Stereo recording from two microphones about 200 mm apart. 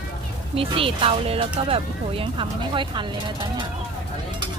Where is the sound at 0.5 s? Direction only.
30° right (ahead or behind).